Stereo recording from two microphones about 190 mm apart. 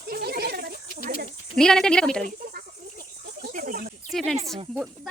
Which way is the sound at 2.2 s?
50° right (ahead or behind).